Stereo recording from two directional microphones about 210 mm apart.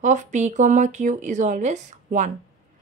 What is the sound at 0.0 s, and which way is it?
Speech, 35° right (ahead or behind).